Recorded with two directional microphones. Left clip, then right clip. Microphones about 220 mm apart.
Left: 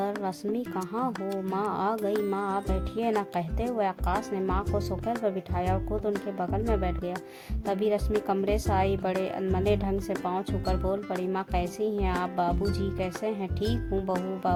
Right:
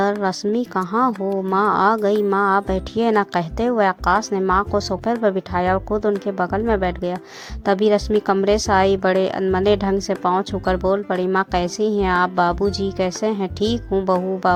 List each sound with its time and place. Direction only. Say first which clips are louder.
0.2 s a woman's voice: right 10 dB; 20° right (ahead or behind)
14.4 s music: right 10 dB; 20° right (ahead or behind)